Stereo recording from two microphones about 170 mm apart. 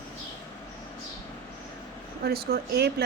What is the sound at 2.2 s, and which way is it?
Speech, 65° right (ahead or behind).